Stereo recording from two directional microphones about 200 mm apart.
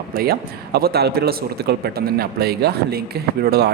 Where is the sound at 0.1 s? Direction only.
50° right (ahead or behind).